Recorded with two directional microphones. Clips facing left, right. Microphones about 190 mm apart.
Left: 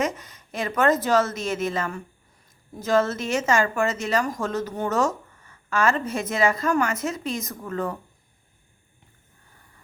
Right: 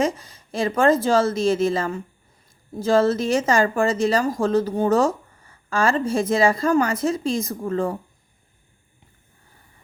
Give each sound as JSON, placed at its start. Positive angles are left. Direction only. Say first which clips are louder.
{"t": 0.0, "sound": "speech", "louder": "right 4 dB", "side_deg": -30}